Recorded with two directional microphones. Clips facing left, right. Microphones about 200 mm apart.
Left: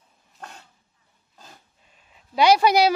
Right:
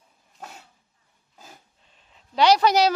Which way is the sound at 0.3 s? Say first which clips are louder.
Even; 5° right (ahead or behind).